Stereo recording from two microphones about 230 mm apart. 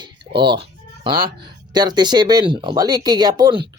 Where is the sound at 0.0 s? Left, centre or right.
Right.